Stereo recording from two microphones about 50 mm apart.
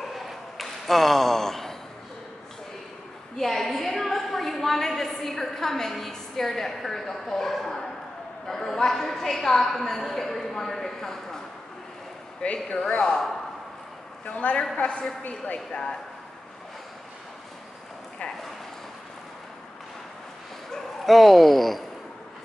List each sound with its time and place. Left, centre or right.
0.1 s a sound: centre
3.3 s a woman's voice: centre
13.0 s a woman's voice: centre
14.2 s a woman's voice: left
15.7 s a woman's voice: centre
20.7 s speech: centre